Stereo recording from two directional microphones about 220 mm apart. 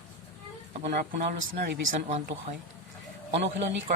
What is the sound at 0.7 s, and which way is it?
Speech, 35° right (ahead or behind).